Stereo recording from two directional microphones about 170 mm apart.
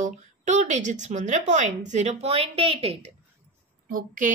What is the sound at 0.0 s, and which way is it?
A woman's voice, 45° right (ahead or behind).